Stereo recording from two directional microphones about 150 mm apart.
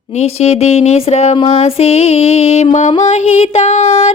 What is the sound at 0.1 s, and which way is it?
Speech, 45° left (ahead or behind).